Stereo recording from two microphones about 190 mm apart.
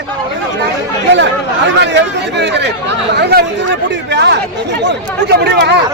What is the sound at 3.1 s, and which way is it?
Speech, 60° right (ahead or behind).